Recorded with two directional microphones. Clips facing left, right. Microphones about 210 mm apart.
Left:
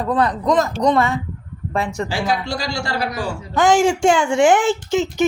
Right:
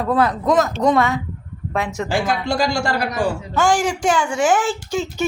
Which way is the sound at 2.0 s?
50° right (ahead or behind).